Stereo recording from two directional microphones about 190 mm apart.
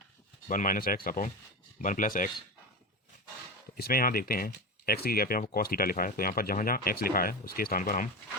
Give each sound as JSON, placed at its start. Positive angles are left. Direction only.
{"t": 0.4, "sound": "speech", "side_deg": 45}
{"t": 3.8, "sound": "speech", "side_deg": 50}